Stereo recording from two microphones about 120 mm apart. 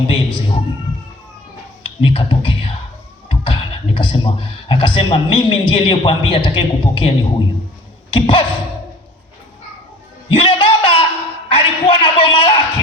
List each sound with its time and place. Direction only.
0.1 s a man's voice: 45° left (ahead or behind)
1.8 s computer keyboard: 45° left (ahead or behind)
3.2 s a man's voice: 45° left (ahead or behind)
10.3 s a sound: 45° left (ahead or behind)